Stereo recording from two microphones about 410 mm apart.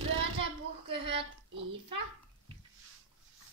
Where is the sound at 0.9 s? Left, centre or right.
Centre.